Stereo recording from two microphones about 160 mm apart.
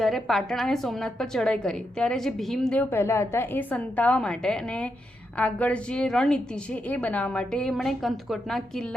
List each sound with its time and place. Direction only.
0.0 s a woman's voice: centre (ahead or behind)
2.9 s a woman's voice: 15° left (ahead or behind)